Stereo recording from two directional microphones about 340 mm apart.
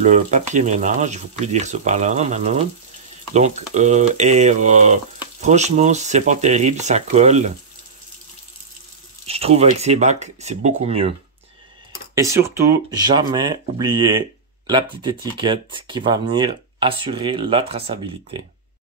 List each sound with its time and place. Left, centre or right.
0.0 s speech: right
9.3 s speech: centre
12.2 s speech: centre